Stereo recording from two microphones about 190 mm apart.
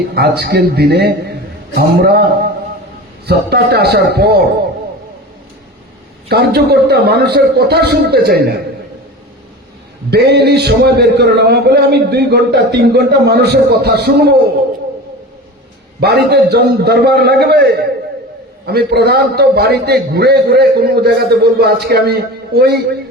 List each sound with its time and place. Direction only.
0.1 s a man's voice: 60° right (ahead or behind)
6.2 s a man's voice: 55° right (ahead or behind)
10.1 s a man's voice: 60° right (ahead or behind)
16.0 s a man's voice: 60° right (ahead or behind)